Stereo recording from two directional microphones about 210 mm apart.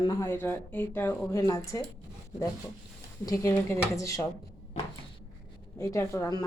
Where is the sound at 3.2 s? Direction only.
15° left (ahead or behind).